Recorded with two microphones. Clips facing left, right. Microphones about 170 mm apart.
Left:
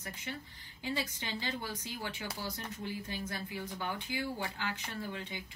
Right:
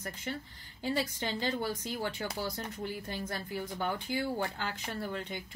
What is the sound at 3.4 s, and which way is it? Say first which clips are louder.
A woman's voice: right 4 dB; 45° right (ahead or behind).